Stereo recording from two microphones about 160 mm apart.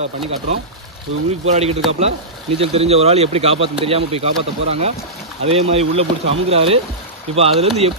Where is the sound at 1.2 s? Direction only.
40° right (ahead or behind).